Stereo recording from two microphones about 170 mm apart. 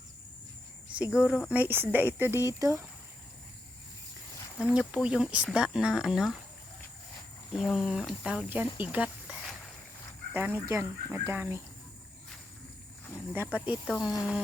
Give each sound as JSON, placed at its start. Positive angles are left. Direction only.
{"t": 0.9, "sound": "speech", "side_deg": -5}
{"t": 4.6, "sound": "speech", "side_deg": -5}
{"t": 7.5, "sound": "speech", "side_deg": 0}
{"t": 13.3, "sound": "speech", "side_deg": -10}
{"t": 13.8, "sound": "speech", "side_deg": 5}